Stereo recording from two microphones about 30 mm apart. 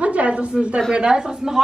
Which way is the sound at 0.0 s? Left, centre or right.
Right.